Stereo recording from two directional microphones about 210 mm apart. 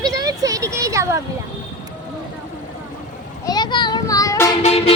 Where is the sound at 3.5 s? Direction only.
20° left (ahead or behind).